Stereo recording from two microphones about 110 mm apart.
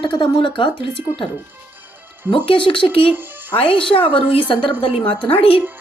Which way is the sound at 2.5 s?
55° left (ahead or behind).